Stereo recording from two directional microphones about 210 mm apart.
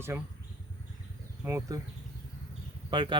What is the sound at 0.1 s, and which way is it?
Speech, 10° right (ahead or behind).